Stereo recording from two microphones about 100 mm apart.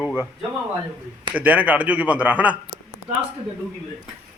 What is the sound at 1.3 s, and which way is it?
Speech, 15° right (ahead or behind).